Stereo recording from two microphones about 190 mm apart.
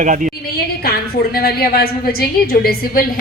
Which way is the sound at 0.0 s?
45° right (ahead or behind).